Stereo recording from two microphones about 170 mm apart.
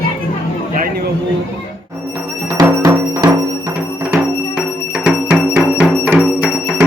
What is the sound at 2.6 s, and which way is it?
Music, 25° right (ahead or behind).